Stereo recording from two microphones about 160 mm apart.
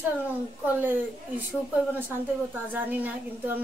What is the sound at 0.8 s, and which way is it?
Speech, 10° right (ahead or behind).